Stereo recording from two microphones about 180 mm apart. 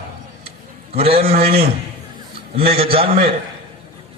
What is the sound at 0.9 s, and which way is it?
A man's voice, 35° right (ahead or behind).